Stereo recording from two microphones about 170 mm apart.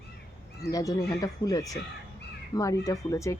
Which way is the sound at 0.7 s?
20° left (ahead or behind).